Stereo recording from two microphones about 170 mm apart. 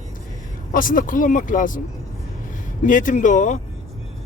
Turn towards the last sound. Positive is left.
turn(degrees=45)  # may be behind; listen again after turning